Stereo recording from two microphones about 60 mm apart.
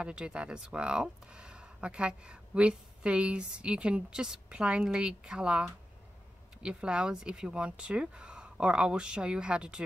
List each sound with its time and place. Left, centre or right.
0.0 s speech: centre